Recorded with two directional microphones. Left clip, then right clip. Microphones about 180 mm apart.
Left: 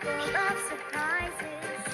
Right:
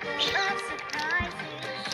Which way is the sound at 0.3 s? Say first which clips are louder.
Left 1 dB; 45° left (ahead or behind).